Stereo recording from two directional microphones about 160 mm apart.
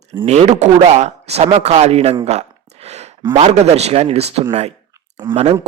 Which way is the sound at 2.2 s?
45° right (ahead or behind).